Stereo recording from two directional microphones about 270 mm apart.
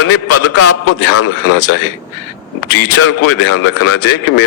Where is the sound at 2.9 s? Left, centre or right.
Left.